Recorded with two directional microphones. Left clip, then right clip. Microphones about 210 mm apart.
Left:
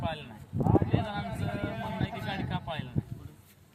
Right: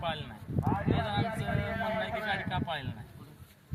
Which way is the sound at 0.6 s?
25° right (ahead or behind).